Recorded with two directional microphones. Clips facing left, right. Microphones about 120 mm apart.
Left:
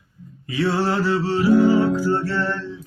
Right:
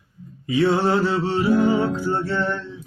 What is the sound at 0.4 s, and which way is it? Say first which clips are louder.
Music: right 3 dB; 20° right (ahead or behind).